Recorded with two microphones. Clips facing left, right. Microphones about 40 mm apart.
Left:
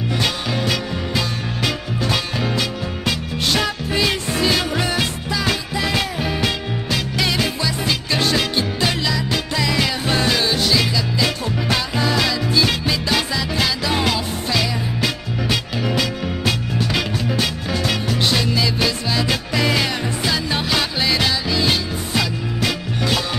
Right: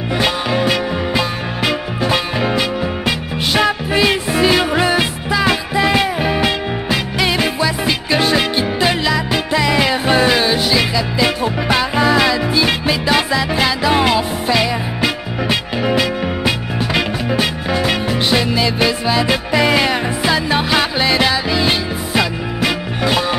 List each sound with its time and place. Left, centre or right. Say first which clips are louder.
0.1 s music: right 7 dB; centre